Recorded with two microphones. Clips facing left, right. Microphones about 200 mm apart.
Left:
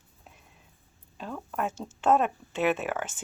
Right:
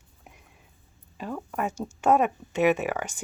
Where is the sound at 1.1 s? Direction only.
10° right (ahead or behind).